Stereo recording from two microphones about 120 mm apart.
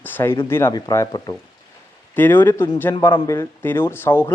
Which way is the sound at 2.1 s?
15° left (ahead or behind).